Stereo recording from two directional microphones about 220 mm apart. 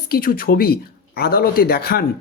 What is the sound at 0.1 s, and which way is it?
Speech, 40° left (ahead or behind).